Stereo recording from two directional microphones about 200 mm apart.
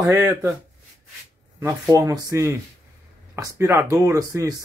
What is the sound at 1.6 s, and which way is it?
Speech, 15° right (ahead or behind).